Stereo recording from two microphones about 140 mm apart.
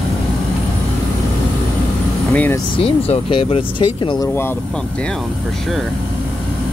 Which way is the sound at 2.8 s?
45° left (ahead or behind).